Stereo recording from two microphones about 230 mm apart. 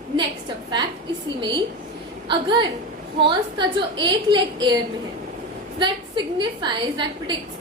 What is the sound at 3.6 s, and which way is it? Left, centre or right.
A woman's voice, centre.